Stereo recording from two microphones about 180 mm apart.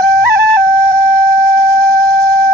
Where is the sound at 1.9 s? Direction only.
5° left (ahead or behind).